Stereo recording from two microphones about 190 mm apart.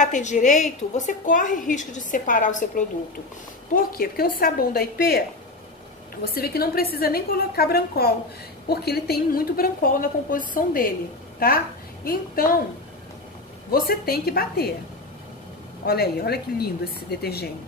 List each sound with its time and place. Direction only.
0.0 s a woman's voice: 40° left (ahead or behind)
6.2 s a woman's voice: 55° left (ahead or behind)
13.7 s a woman's voice: 50° left (ahead or behind)
15.8 s a woman's voice: 55° left (ahead or behind)